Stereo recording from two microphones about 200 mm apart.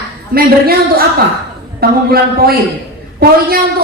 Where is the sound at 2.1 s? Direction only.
50° right (ahead or behind).